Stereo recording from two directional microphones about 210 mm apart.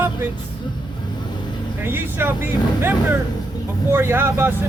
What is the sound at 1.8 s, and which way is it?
Speech, 10° right (ahead or behind).